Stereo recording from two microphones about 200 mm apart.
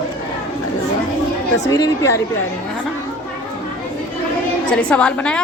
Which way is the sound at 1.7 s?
20° left (ahead or behind).